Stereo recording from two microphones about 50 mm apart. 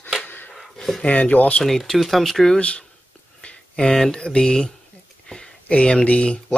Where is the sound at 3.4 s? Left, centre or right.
Centre.